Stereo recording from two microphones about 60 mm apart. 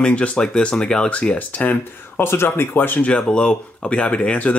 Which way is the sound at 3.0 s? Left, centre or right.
Centre.